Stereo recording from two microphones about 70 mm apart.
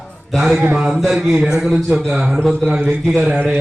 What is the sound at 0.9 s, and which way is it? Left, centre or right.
A man's voice, centre.